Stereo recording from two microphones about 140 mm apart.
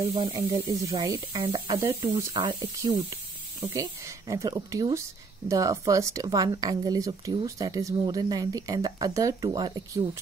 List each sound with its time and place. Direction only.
0.1 s speech: 30° right (ahead or behind)
2.3 s speech: 35° right (ahead or behind)
3.7 s speech: 25° right (ahead or behind)